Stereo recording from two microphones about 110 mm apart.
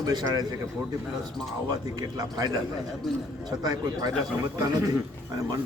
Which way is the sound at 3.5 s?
35° right (ahead or behind).